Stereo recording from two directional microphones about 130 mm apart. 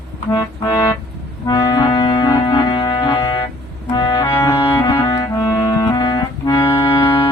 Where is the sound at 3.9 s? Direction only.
30° left (ahead or behind).